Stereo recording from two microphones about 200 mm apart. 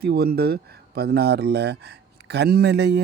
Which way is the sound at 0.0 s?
50° right (ahead or behind).